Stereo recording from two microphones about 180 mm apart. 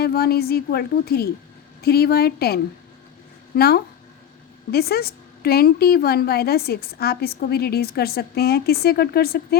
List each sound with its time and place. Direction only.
0.0 s a woman's voice: 60° left (ahead or behind)